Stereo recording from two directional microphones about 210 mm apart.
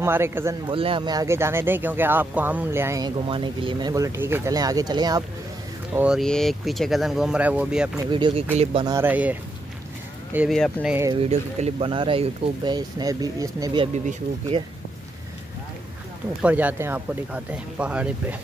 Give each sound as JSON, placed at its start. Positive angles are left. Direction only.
{"t": 0.0, "sound": "speech", "side_deg": -10}
{"t": 0.7, "sound": "speech", "side_deg": -25}
{"t": 5.9, "sound": "speech", "side_deg": -5}
{"t": 8.1, "sound": "speech", "side_deg": -25}
{"t": 8.9, "sound": "speech", "side_deg": -10}
{"t": 11.2, "sound": "speech", "side_deg": -30}
{"t": 16.4, "sound": "speech", "side_deg": -10}